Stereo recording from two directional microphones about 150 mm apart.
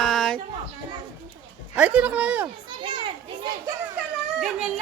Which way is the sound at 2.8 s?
30° right (ahead or behind).